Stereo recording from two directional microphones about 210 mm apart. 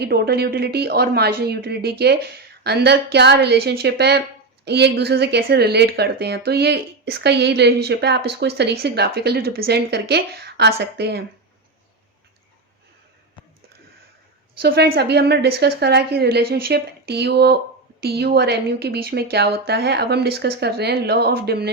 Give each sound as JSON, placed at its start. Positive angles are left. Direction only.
{"t": 0.0, "sound": "speech", "side_deg": -50}
{"t": 14.6, "sound": "speech", "side_deg": -45}